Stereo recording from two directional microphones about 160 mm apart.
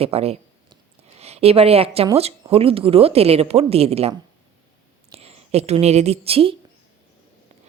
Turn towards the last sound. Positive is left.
turn(degrees=-35)  # may be behind; listen again after turning